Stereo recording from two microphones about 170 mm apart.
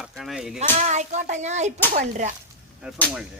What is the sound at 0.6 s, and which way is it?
Speech, 45° right (ahead or behind).